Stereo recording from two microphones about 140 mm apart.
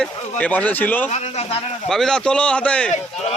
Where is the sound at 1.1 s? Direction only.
55° left (ahead or behind).